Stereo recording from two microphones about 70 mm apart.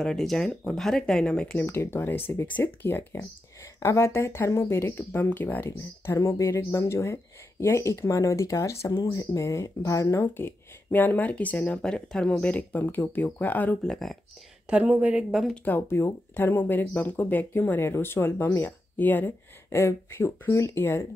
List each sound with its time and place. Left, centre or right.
0.0 s speech: centre
1.6 s speech: left
6.1 s speech: left
10.3 s speech: left
13.8 s speech: centre
14.7 s a woman's voice: centre
15.5 s speech: left